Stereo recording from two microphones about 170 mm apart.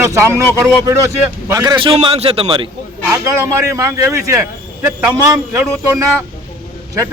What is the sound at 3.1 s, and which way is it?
Speech, 15° right (ahead or behind).